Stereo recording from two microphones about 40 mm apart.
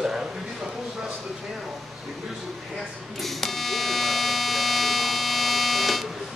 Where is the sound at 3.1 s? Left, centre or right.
Centre.